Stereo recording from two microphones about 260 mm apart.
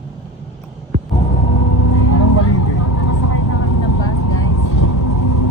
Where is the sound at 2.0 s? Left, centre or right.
Left.